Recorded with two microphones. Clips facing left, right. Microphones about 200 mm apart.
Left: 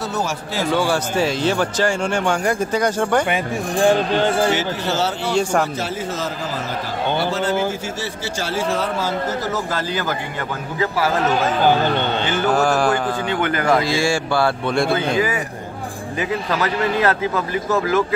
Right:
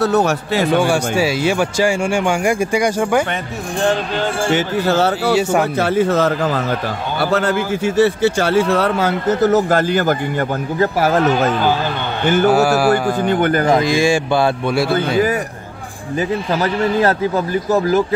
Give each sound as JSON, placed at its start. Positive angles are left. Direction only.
{"t": 0.0, "sound": "a man's voice", "side_deg": -65}
{"t": 0.7, "sound": "speech", "side_deg": -15}
{"t": 4.5, "sound": "a man's voice", "side_deg": -55}
{"t": 5.3, "sound": "speech", "side_deg": -5}
{"t": 5.8, "sound": "a man's voice", "side_deg": -60}
{"t": 12.4, "sound": "speech", "side_deg": -10}
{"t": 13.2, "sound": "speech", "side_deg": -45}
{"t": 13.7, "sound": "speech", "side_deg": -20}
{"t": 14.7, "sound": "speech", "side_deg": -5}
{"t": 16.2, "sound": "a man's voice", "side_deg": -35}